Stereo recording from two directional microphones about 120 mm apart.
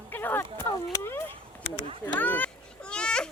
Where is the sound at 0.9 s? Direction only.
20° left (ahead or behind).